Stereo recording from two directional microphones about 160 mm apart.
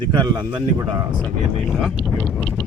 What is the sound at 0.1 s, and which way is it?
Speech, 30° right (ahead or behind).